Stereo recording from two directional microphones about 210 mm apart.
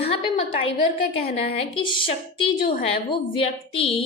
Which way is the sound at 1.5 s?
25° left (ahead or behind).